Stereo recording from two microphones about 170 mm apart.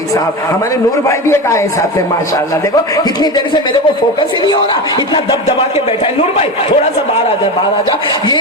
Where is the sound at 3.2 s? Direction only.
25° left (ahead or behind).